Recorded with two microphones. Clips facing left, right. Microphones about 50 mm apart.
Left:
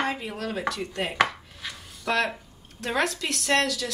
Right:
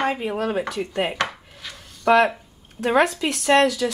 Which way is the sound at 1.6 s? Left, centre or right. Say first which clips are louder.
Left 1 dB; centre.